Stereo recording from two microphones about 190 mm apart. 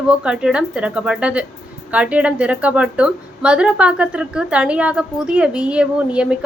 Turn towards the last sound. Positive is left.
turn(degrees=-5)  # may be behind; listen again after turning